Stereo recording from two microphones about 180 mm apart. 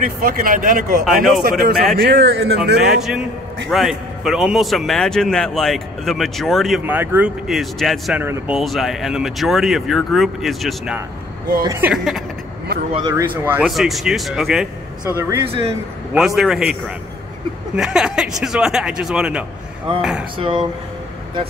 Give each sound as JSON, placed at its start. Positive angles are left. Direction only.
{"t": 0.0, "sound": "speech", "side_deg": -50}
{"t": 1.4, "sound": "speech", "side_deg": -60}
{"t": 2.0, "sound": "speech", "side_deg": -75}
{"t": 2.8, "sound": "a man's voice", "side_deg": 0}
{"t": 6.8, "sound": "a man's voice", "side_deg": -10}
{"t": 11.6, "sound": "speech", "side_deg": -20}
{"t": 11.9, "sound": "a man's voice", "side_deg": 0}
{"t": 12.9, "sound": "speech", "side_deg": -25}
{"t": 13.5, "sound": "a man's voice", "side_deg": -5}
{"t": 15.1, "sound": "speech", "side_deg": -15}
{"t": 15.4, "sound": "speech", "side_deg": -30}
{"t": 16.1, "sound": "a man's voice", "side_deg": 0}
{"t": 17.7, "sound": "a man's voice", "side_deg": -5}
{"t": 20.3, "sound": "speech", "side_deg": -25}